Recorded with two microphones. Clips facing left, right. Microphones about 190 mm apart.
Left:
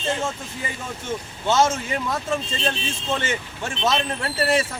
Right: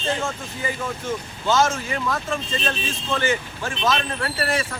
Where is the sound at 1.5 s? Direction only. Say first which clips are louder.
Left 1 dB; 25° left (ahead or behind).